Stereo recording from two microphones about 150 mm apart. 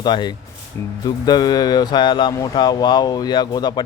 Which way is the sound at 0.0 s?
30° left (ahead or behind).